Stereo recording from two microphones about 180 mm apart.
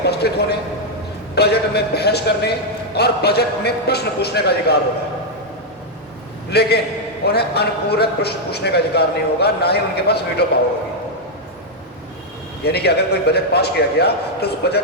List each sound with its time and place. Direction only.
0.0 s a man's voice: 65° left (ahead or behind)
6.5 s a man's voice: 65° left (ahead or behind)
12.6 s a man's voice: 65° left (ahead or behind)